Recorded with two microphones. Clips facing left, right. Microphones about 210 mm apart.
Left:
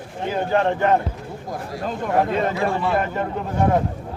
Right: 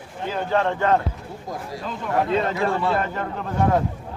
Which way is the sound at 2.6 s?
15° left (ahead or behind).